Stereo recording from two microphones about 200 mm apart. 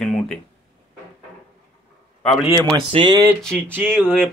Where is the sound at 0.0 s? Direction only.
5° left (ahead or behind).